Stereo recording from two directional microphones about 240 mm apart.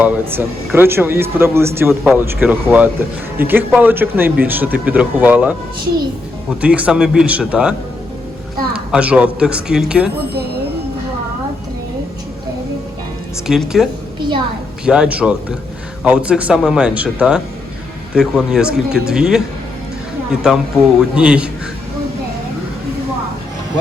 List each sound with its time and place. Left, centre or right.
0.0 s speech: centre
6.6 s speech: centre
13.5 s speech: centre
14.2 s music: centre
14.8 s speech: centre
21.2 s speech: centre